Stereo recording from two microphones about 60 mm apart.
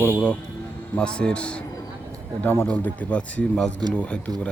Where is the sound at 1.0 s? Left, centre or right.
Centre.